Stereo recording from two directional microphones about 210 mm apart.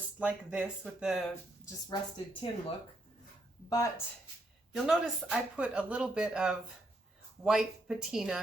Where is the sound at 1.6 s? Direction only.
20° left (ahead or behind).